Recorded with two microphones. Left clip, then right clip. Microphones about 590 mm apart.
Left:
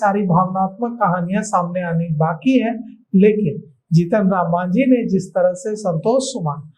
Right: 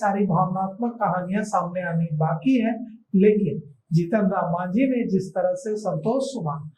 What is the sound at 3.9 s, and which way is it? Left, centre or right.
Speech, left.